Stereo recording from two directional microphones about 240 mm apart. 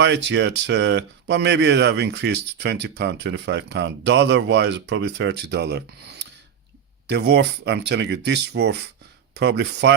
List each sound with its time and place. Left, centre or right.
0.0 s speech: right